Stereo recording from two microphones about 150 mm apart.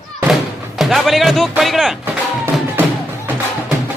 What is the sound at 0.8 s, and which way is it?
Music, centre (ahead or behind).